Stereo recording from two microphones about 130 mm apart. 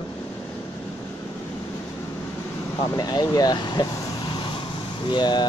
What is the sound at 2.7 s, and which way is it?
Speech, 30° left (ahead or behind).